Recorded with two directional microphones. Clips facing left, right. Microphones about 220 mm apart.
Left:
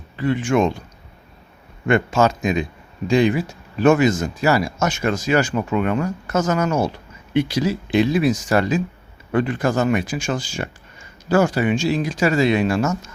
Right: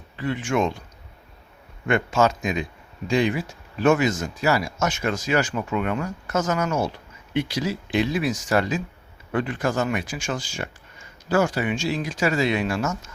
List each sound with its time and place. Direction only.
0.2 s speech: 40° left (ahead or behind)
1.9 s speech: 35° left (ahead or behind)